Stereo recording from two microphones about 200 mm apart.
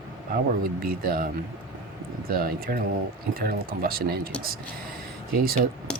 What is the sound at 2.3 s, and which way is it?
Speech, 45° right (ahead or behind).